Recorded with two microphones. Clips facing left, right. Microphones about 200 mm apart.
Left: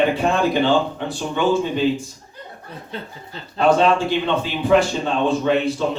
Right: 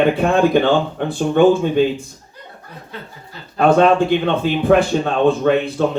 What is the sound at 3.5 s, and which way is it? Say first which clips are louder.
Speech: right 3 dB; 55° right (ahead or behind).